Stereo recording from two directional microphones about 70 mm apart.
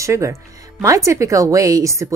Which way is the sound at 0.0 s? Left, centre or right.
Right.